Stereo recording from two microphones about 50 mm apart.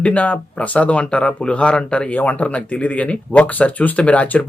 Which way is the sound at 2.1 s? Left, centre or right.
Left.